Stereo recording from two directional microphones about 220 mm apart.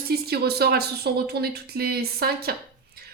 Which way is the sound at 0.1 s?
45° right (ahead or behind).